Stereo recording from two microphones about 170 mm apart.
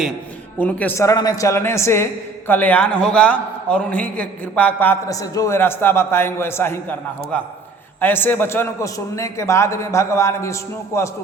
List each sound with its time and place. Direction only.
0.6 s a man's voice: 10° left (ahead or behind)